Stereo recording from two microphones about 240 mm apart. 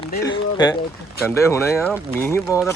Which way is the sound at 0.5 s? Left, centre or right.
Centre.